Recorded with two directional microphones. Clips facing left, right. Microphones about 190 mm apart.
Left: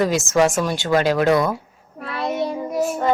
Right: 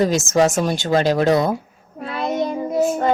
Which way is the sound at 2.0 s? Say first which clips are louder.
Right 1 dB; 20° right (ahead or behind).